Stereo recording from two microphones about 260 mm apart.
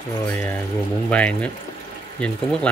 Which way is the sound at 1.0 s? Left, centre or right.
Centre.